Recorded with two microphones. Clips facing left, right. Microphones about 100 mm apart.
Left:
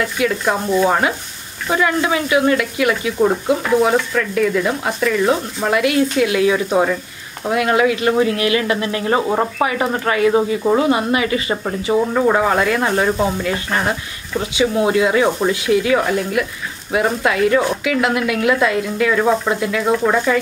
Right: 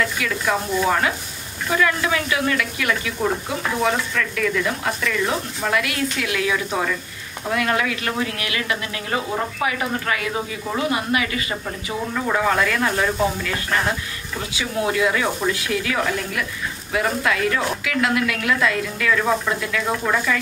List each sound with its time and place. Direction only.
0.0 s speech: 30° left (ahead or behind)